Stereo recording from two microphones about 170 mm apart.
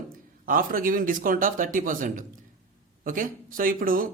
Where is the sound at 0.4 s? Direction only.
55° right (ahead or behind).